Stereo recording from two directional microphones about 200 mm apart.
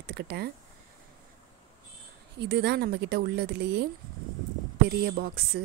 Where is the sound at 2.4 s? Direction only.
55° right (ahead or behind).